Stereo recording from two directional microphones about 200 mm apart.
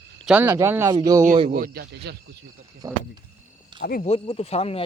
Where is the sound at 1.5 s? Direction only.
45° right (ahead or behind).